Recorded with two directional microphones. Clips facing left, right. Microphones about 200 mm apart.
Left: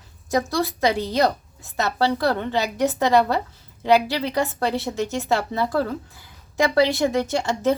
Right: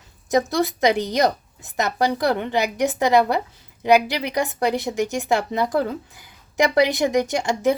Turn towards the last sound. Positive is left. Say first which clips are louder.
# right 1 dB
turn(degrees=-15)  # may be behind; listen again after turning